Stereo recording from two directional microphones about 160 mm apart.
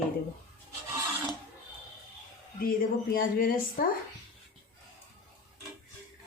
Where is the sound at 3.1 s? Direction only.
65° left (ahead or behind).